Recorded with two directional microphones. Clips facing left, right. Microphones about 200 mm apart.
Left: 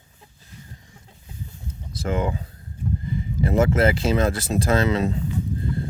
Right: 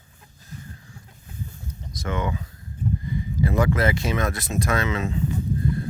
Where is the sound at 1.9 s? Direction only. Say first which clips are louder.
Left 3 dB; 30° left (ahead or behind).